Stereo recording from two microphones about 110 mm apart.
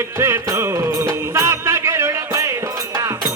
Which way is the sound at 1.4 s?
25° right (ahead or behind).